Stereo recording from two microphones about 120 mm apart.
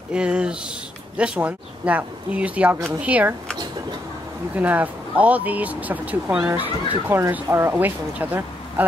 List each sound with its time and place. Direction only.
0.1 s speech: 10° right (ahead or behind)
4.6 s speech: 15° right (ahead or behind)